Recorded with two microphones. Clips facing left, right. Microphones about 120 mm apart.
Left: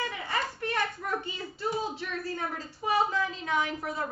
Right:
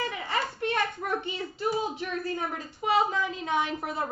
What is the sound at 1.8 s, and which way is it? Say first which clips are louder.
A woman's voice: right 3 dB; 15° right (ahead or behind).